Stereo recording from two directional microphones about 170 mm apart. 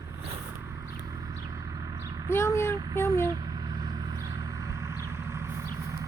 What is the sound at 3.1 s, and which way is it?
Vehicle, 20° right (ahead or behind).